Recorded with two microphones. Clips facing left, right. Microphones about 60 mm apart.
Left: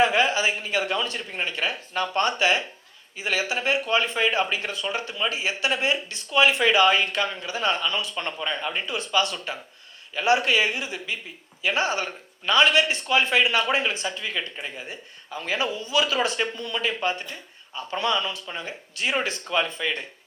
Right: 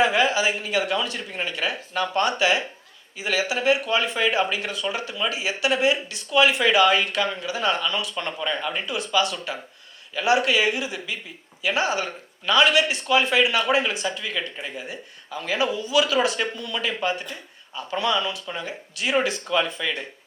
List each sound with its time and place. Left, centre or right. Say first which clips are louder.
0.0 s speech: right 1 dB; left